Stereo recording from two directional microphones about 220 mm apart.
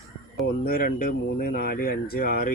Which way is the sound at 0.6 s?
40° left (ahead or behind).